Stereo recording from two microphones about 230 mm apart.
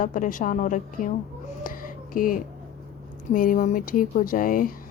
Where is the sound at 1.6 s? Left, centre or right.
Left.